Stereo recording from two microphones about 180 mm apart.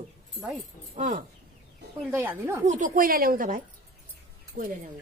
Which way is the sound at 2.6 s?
45° right (ahead or behind).